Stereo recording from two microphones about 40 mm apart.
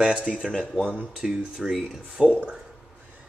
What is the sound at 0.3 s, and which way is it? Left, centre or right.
Speech, right.